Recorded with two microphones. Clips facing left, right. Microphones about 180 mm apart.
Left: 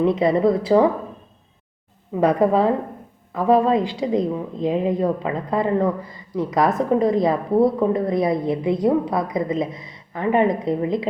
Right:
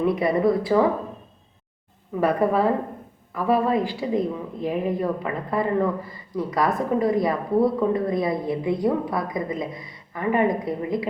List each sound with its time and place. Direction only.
0.0 s a woman's voice: 20° left (ahead or behind)
2.2 s a woman's voice: 20° left (ahead or behind)